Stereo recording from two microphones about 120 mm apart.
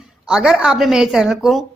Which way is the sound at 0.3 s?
5° right (ahead or behind).